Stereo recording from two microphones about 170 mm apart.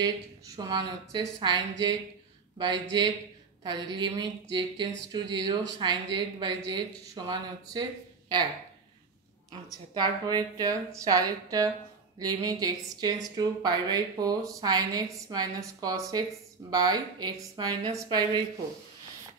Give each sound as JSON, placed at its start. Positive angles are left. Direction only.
{"t": 0.6, "sound": "a woman's voice", "side_deg": -25}
{"t": 9.9, "sound": "a woman's voice", "side_deg": -25}